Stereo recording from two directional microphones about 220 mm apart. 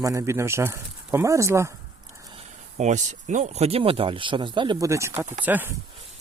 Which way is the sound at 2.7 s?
35° right (ahead or behind).